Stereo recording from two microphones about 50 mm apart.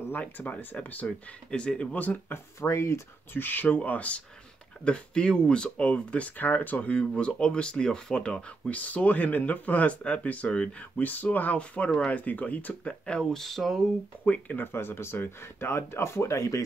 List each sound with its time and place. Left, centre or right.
0.2 s speech: left
2.7 s speech: left
3.3 s speech: left
4.8 s speech: centre; by 6.8 s left
6.8 s speech: left
8.7 s speech: left
13.2 s speech: centre
14.2 s speech: left
14.7 s speech: left